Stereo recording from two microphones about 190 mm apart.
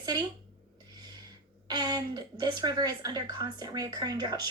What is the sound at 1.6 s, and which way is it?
A woman's voice, 20° right (ahead or behind).